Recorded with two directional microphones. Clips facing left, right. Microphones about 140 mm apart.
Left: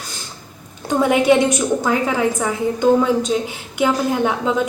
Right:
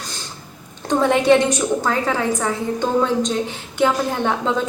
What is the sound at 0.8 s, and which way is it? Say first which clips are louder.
A woman's voice: even; 10° left (ahead or behind).